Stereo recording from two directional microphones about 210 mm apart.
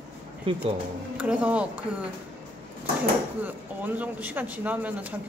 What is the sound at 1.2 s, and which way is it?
Speech, 5° right (ahead or behind).